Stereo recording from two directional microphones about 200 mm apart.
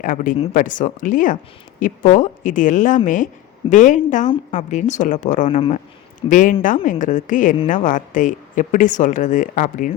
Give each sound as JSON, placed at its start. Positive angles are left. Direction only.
{"t": 0.0, "sound": "speech", "side_deg": 45}
{"t": 6.2, "sound": "speech", "side_deg": 40}